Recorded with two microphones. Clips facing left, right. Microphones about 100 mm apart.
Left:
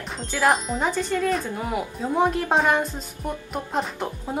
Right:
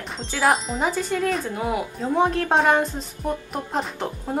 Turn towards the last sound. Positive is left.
turn(degrees=0)  # may be behind; listen again after turning